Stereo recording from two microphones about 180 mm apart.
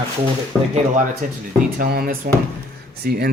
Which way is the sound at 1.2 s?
45° right (ahead or behind).